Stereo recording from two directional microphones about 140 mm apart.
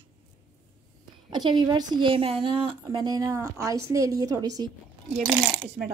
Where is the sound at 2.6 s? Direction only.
30° right (ahead or behind).